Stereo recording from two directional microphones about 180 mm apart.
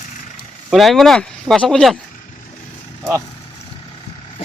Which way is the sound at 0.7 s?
Centre (ahead or behind).